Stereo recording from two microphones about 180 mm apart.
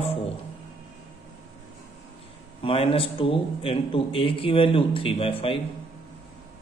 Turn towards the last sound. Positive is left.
turn(degrees=30)  # may be behind; listen again after turning